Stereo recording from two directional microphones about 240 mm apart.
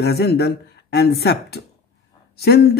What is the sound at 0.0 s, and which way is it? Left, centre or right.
Speech, left.